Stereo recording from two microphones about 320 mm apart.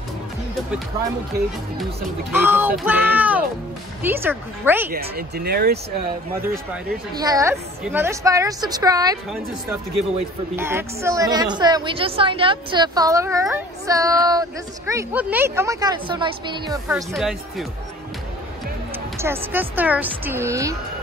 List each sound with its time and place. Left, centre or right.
2.3 s a woman's voice: centre
4.9 s speech: right
7.2 s a woman's voice: centre
10.5 s a woman's voice: centre
17.1 s speech: centre
19.1 s a woman's voice: centre